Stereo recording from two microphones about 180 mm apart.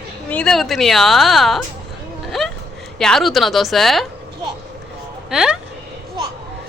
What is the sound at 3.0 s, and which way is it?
Speech, centre (ahead or behind).